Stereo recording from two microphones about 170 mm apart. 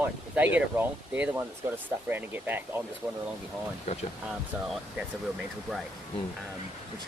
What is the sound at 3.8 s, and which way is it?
Speech, 40° left (ahead or behind).